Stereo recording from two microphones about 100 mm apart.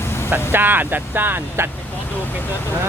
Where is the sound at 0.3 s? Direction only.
20° right (ahead or behind).